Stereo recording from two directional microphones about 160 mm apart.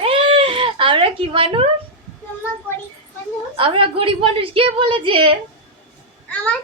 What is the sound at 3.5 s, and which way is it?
A woman's voice, 35° right (ahead or behind).